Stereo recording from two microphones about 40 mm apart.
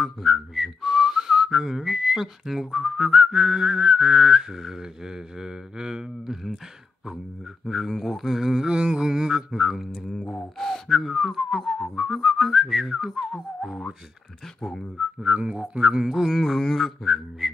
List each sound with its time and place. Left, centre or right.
0.0 s whistling: centre
7.6 s speech: centre
8.7 s speech: right
9.0 s a sound: centre
10.9 s speech: centre
12.8 s a sound: centre
13.3 s speech: centre
14.6 s speech: centre
15.0 s a sound: centre
15.4 s speech: right
16.1 s speech: centre
16.4 s speech: centre